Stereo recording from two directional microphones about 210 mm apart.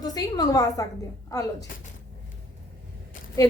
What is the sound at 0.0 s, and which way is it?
A woman's voice, 15° left (ahead or behind).